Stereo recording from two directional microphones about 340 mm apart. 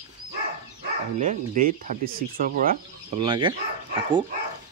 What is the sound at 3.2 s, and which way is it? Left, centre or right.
Speech, centre.